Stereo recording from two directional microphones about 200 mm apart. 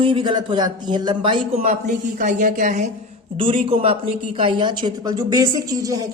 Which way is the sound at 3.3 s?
25° right (ahead or behind).